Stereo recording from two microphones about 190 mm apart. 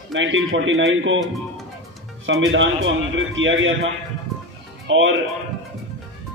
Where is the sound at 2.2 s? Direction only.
85° right.